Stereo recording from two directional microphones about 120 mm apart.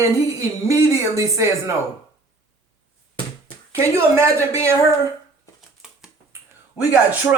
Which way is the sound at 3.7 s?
25° right (ahead or behind).